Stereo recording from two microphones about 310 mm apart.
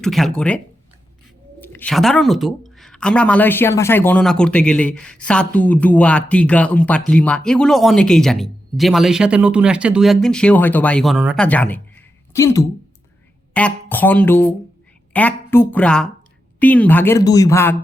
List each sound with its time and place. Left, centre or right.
0.0 s speech: centre
1.6 s speech: centre